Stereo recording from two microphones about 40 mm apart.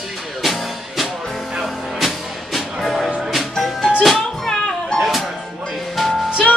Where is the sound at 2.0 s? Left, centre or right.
Centre.